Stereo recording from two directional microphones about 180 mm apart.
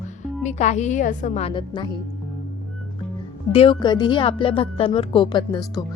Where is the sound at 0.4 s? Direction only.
40° left (ahead or behind).